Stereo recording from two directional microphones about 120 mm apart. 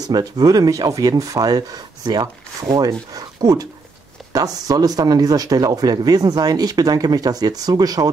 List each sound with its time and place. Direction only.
0.0 s speech: 30° right (ahead or behind)